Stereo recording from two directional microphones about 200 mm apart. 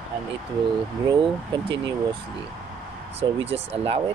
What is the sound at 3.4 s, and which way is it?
Speech, 30° right (ahead or behind).